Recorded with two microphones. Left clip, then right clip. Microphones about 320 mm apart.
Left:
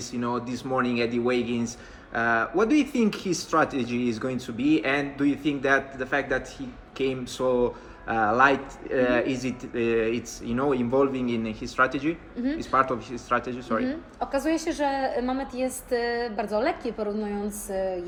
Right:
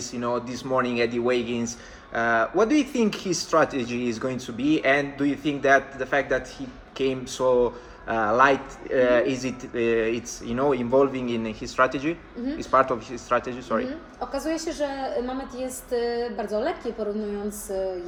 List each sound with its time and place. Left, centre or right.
0.1 s speech: centre
14.3 s a woman's voice: left